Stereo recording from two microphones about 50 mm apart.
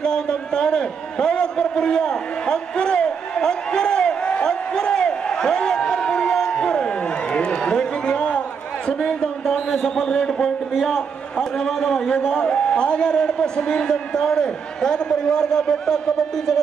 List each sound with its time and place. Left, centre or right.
0.0 s a sound: centre
10.1 s a man's voice: centre
10.7 s a man's voice: centre